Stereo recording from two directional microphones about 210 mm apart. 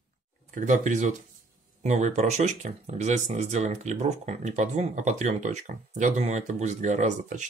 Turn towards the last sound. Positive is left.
turn(degrees=-35)  # may be behind; listen again after turning